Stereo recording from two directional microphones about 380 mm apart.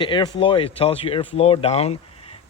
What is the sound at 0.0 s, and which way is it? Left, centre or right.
Speech, centre.